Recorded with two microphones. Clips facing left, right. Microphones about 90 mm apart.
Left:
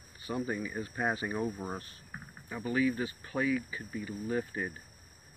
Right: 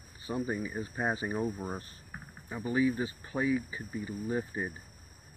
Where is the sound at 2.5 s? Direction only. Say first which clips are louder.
Right 1 dB; 20° right (ahead or behind).